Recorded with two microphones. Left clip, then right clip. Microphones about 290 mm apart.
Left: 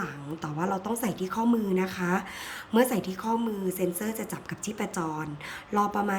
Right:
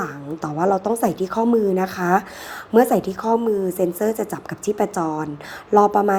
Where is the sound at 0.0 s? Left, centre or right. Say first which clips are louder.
Right 8 dB; centre.